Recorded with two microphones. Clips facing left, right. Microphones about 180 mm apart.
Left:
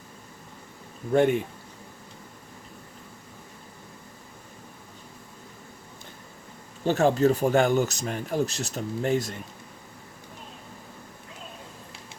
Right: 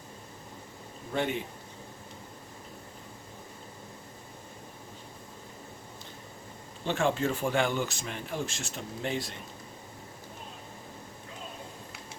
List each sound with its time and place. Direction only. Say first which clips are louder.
1.1 s a man's voice: left 10 dB; 50° left (ahead or behind)
6.8 s speech: left 7 dB; 40° left (ahead or behind)